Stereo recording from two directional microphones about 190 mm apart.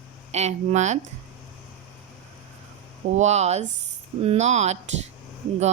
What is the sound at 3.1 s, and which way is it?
Speech, 35° right (ahead or behind).